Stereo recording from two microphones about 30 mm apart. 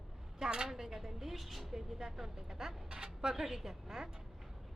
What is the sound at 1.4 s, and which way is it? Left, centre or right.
Vehicle, centre.